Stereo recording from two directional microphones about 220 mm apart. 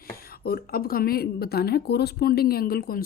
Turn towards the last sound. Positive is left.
turn(degrees=40)  # may be behind; listen again after turning